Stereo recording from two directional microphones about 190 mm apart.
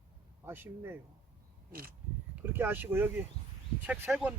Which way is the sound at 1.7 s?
50° right (ahead or behind).